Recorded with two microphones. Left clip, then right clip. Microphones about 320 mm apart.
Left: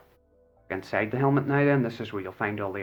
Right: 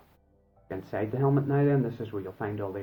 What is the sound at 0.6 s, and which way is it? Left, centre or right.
Speech, left.